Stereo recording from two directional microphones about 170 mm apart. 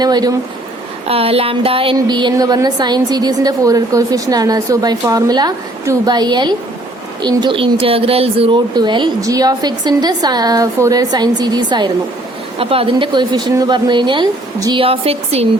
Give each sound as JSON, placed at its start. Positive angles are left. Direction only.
{"t": 0.0, "sound": "a woman's voice", "side_deg": -25}
{"t": 1.0, "sound": "a woman's voice", "side_deg": -35}